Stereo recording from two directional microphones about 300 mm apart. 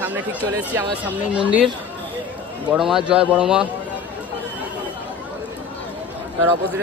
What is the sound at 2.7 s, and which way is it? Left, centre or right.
Speech, centre.